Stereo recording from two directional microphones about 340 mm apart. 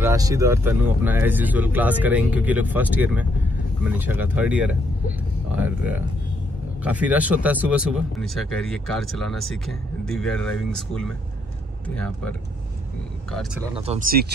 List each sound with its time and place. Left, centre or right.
0.0 s speech: centre
13.7 s speech: centre